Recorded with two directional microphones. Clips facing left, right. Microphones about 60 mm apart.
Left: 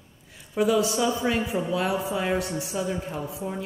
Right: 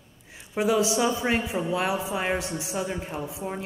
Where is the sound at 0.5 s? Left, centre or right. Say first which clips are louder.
Left 1 dB; right.